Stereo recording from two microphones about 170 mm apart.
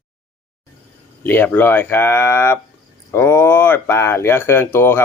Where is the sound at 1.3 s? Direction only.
10° left (ahead or behind).